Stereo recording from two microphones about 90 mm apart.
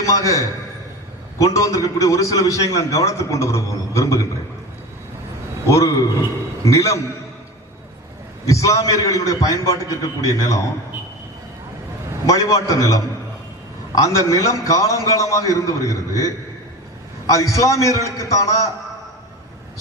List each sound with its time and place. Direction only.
0.0 s a man's voice: 35° left (ahead or behind)
5.6 s a man's voice: 35° left (ahead or behind)
8.4 s a man's voice: 35° left (ahead or behind)
12.2 s a man's voice: 40° left (ahead or behind)
17.3 s a man's voice: 35° left (ahead or behind)